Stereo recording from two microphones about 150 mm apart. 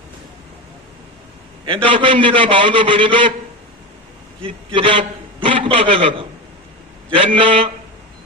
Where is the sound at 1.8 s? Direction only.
35° right (ahead or behind).